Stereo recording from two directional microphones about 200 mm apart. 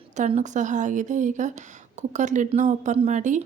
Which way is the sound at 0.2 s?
35° right (ahead or behind).